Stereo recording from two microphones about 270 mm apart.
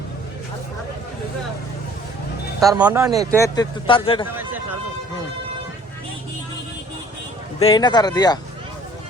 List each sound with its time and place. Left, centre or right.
2.6 s speech: centre
3.3 s speech: centre
7.6 s speech: centre